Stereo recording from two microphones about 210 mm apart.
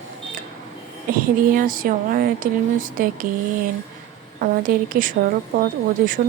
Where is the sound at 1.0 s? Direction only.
40° right (ahead or behind).